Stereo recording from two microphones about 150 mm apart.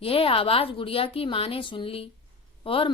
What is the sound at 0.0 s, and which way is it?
A woman's voice, 40° left (ahead or behind).